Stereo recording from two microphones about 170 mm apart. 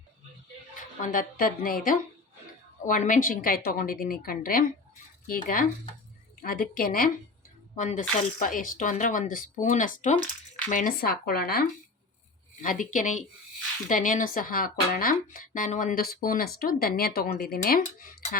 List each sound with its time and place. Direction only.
1.0 s speech: 55° left (ahead or behind)
7.8 s speech: 45° left (ahead or behind); by 11.7 s 65° left (ahead or behind)
12.6 s speech: 50° left (ahead or behind)